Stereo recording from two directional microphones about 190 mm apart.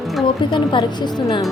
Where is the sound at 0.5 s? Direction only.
25° left (ahead or behind).